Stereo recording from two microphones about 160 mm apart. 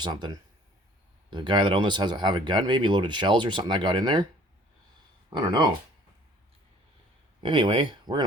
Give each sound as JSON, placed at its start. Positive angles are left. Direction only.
{"t": 0.0, "sound": "speech", "side_deg": -25}
{"t": 1.3, "sound": "speech", "side_deg": -30}
{"t": 5.3, "sound": "speech", "side_deg": -25}
{"t": 7.4, "sound": "speech", "side_deg": -30}